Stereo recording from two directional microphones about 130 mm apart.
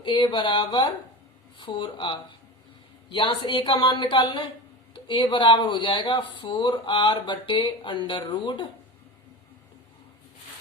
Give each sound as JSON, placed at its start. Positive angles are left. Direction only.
{"t": 0.0, "sound": "speech", "side_deg": 35}